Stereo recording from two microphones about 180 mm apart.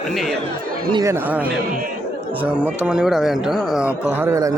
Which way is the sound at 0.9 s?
15° right (ahead or behind).